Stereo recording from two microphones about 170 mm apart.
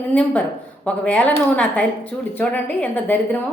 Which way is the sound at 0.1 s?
10° left (ahead or behind).